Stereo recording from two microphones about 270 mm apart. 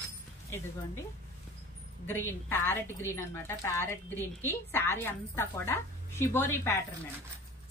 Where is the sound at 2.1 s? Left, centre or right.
Centre.